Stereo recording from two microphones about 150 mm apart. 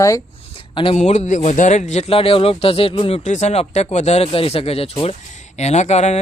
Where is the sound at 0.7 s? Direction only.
35° left (ahead or behind).